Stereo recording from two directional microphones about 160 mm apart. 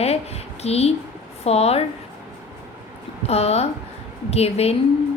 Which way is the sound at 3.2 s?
40° left (ahead or behind).